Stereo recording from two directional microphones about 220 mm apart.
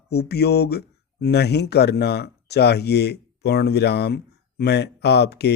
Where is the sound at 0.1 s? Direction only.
50° left (ahead or behind).